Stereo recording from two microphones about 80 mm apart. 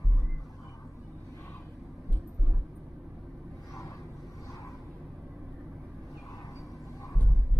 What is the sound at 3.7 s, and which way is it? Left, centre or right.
Vehicle, left.